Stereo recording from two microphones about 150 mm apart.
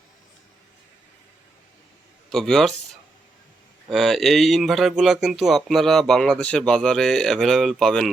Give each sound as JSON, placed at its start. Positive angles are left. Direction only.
{"t": 2.3, "sound": "speech", "side_deg": 0}
{"t": 3.8, "sound": "speech", "side_deg": 0}